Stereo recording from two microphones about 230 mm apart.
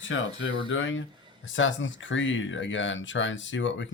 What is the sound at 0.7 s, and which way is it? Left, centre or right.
Speech, left.